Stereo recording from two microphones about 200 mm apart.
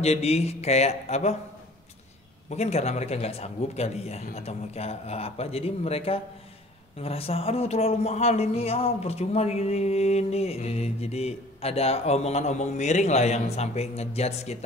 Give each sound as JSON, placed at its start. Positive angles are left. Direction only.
{"t": 0.0, "sound": "a man's voice", "side_deg": 30}
{"t": 2.5, "sound": "a man's voice", "side_deg": 35}